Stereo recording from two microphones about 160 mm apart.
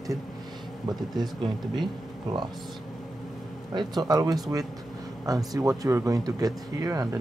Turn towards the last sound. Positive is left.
turn(degrees=-20)  # may be behind; listen again after turning